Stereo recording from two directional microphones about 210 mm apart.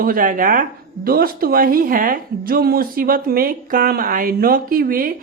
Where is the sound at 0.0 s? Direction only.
40° right (ahead or behind).